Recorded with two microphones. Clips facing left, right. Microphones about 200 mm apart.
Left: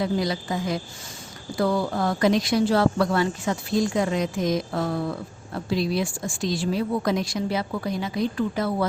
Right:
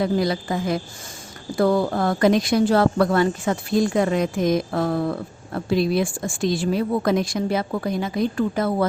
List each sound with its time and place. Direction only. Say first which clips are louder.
0.0 s a woman's voice: right 4 dB; 55° right (ahead or behind)